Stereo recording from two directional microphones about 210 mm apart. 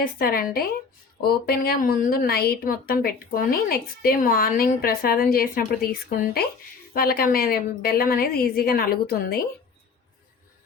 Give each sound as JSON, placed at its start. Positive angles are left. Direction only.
{"t": 0.0, "sound": "a woman's voice", "side_deg": 45}